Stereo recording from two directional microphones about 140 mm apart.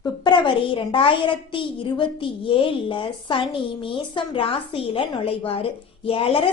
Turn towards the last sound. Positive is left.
turn(degrees=40)  # may be behind; listen again after turning